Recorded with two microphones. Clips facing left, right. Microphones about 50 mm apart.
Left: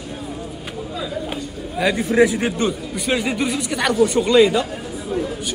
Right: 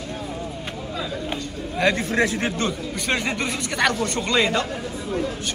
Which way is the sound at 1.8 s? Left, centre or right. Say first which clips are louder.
Left 4 dB; centre.